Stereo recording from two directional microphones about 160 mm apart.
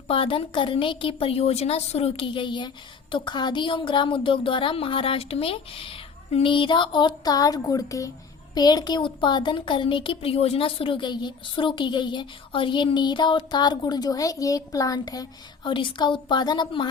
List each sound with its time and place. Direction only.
0.1 s a woman's voice: 35° left (ahead or behind)